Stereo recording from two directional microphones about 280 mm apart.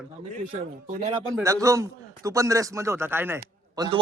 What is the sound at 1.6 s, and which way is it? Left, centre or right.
Speech, centre.